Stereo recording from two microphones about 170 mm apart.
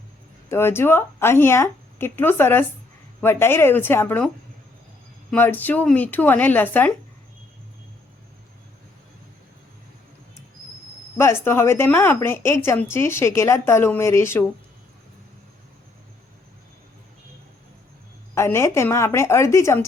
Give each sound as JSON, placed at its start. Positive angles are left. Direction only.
{"t": 0.4, "sound": "a woman's voice", "side_deg": 15}
{"t": 5.3, "sound": "a woman's voice", "side_deg": 10}
{"t": 11.2, "sound": "a woman's voice", "side_deg": 15}
{"t": 18.3, "sound": "a woman's voice", "side_deg": 15}